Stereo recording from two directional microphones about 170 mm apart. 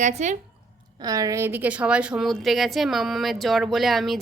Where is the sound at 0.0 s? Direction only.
45° right (ahead or behind).